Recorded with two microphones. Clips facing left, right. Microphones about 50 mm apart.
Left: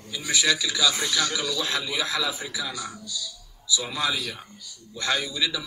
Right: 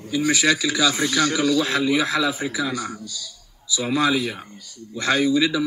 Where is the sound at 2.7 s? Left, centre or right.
Right.